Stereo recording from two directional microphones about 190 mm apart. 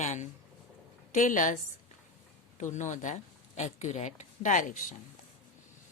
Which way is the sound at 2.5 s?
40° left (ahead or behind).